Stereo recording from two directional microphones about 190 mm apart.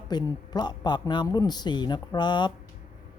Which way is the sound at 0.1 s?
20° left (ahead or behind).